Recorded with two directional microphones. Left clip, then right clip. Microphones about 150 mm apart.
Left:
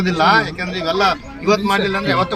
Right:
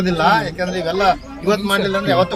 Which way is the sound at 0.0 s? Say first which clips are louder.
Left 1 dB; 30° right (ahead or behind).